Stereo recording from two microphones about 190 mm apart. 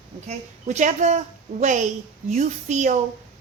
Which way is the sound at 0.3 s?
40° right (ahead or behind).